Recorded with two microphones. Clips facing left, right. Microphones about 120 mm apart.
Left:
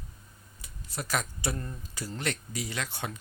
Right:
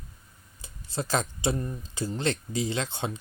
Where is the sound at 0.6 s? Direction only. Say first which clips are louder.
Right 6 dB; 30° right (ahead or behind).